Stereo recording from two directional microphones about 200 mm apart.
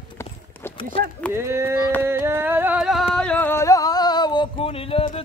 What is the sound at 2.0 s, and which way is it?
Singing, 10° right (ahead or behind).